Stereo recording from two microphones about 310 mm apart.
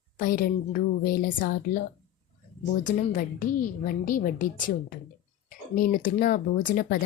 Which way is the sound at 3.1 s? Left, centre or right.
Left.